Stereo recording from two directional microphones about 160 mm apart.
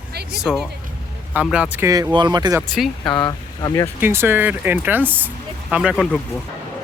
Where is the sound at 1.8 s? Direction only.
20° right (ahead or behind).